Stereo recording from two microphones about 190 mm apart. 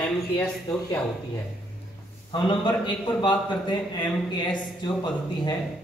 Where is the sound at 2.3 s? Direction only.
25° left (ahead or behind).